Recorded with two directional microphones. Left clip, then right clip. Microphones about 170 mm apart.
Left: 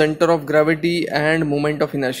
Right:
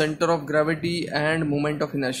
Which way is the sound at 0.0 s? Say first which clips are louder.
Left 6 dB; 35° left (ahead or behind).